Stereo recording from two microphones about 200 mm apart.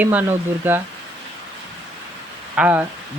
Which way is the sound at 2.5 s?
5° right (ahead or behind).